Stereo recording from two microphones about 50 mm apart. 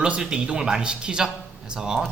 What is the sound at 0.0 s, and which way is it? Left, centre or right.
A man's voice, centre.